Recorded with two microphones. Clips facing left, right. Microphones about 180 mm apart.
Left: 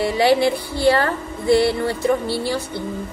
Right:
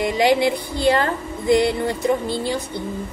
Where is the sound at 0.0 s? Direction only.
15° right (ahead or behind).